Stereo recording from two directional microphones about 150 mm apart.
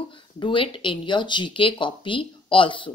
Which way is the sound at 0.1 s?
35° left (ahead or behind).